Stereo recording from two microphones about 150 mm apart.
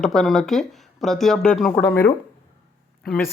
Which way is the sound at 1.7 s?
15° left (ahead or behind).